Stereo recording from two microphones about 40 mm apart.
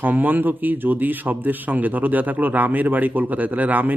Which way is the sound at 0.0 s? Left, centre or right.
Right.